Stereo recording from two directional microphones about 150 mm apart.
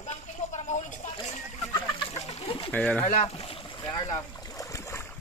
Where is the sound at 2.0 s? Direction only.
35° left (ahead or behind).